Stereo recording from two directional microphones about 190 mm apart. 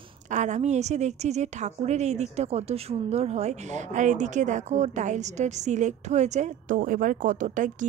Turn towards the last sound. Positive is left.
turn(degrees=-40)  # may be behind; listen again after turning